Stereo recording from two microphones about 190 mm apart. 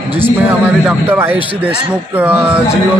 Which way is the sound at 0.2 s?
10° right (ahead or behind).